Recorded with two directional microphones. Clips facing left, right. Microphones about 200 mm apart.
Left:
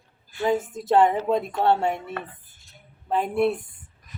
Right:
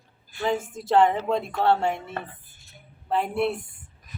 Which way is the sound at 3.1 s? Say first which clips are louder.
Left 2 dB; 15° left (ahead or behind).